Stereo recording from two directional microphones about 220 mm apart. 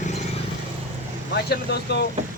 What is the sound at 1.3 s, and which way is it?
Speech, 50° left (ahead or behind).